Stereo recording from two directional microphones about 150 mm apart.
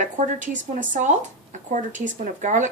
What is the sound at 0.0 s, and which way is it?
Speech, 55° right (ahead or behind).